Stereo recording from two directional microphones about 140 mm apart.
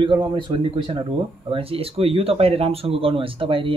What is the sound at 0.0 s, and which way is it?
Speech, 35° right (ahead or behind).